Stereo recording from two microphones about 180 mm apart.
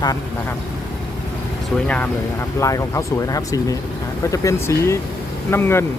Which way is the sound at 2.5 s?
15° left (ahead or behind).